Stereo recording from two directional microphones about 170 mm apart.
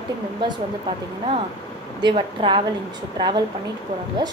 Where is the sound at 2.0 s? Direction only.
30° right (ahead or behind).